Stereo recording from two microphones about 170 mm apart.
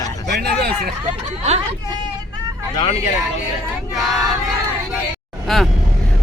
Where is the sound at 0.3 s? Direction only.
75° right (ahead or behind).